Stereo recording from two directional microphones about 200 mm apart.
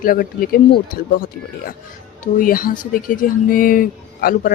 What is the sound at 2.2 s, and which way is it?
Speech, 45° left (ahead or behind).